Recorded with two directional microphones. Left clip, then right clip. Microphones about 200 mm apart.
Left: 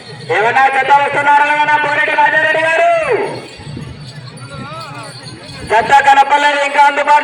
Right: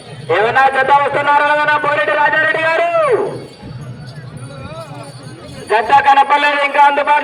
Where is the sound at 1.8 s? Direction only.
45° left (ahead or behind).